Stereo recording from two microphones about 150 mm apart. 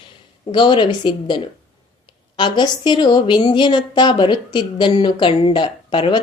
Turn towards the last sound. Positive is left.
turn(degrees=35)  # may be behind; listen again after turning